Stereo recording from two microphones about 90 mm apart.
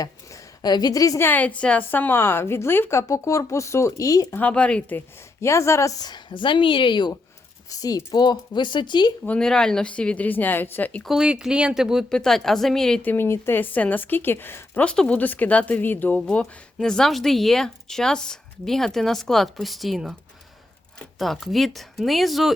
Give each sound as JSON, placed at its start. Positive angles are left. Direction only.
{"t": 0.0, "sound": "a sound", "side_deg": 45}
{"t": 1.2, "sound": "a woman's voice", "side_deg": 20}
{"t": 4.4, "sound": "speech", "side_deg": 15}
{"t": 5.4, "sound": "speech", "side_deg": 30}
{"t": 7.7, "sound": "speech", "side_deg": 40}
{"t": 9.2, "sound": "speech", "side_deg": 10}
{"t": 11.0, "sound": "speech", "side_deg": -5}
{"t": 12.0, "sound": "speech", "side_deg": 5}
{"t": 13.0, "sound": "a woman's voice", "side_deg": 25}
{"t": 14.8, "sound": "speech", "side_deg": 10}
{"t": 16.2, "sound": "speech", "side_deg": 10}